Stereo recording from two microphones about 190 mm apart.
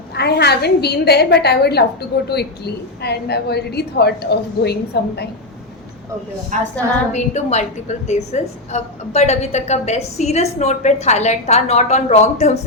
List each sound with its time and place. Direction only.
0.2 s a woman's voice: 60° left (ahead or behind)
6.5 s a woman's voice: 40° right (ahead or behind)
7.1 s a woman's voice: 35° left (ahead or behind)